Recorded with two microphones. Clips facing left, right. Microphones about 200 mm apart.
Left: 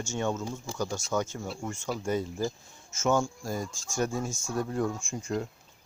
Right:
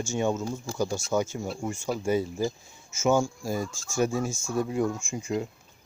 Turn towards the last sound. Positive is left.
turn(degrees=-10)  # may be behind; listen again after turning